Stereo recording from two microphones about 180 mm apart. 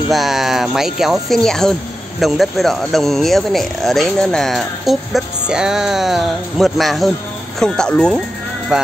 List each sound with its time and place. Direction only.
0.1 s speech: centre (ahead or behind)